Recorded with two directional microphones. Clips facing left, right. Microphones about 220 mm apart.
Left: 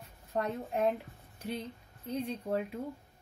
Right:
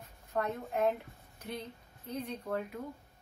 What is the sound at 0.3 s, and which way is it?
Speech, 30° left (ahead or behind).